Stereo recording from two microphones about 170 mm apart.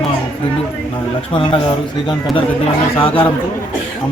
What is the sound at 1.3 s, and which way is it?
Speech, 30° left (ahead or behind).